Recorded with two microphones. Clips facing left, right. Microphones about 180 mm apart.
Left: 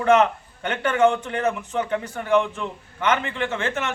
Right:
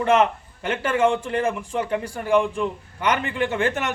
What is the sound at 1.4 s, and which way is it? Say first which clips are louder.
A man's voice: even; 10° right (ahead or behind).